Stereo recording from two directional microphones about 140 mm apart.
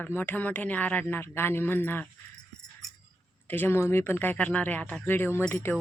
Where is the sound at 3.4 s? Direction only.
15° left (ahead or behind).